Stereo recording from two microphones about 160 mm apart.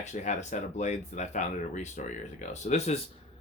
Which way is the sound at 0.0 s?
50° left (ahead or behind).